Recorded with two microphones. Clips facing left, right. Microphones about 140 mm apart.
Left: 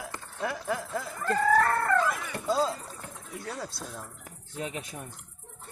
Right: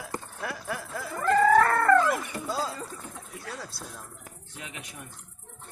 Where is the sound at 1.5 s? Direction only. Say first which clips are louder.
Right 4 dB; 90° right.